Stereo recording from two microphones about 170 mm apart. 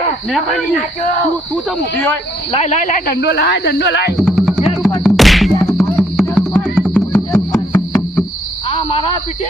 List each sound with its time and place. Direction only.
2.5 s speech: 40° left (ahead or behind)
3.1 s speech: 80° left
4.2 s music: centre (ahead or behind)
7.3 s music: 15° left (ahead or behind)
8.7 s a sound: 35° left (ahead or behind)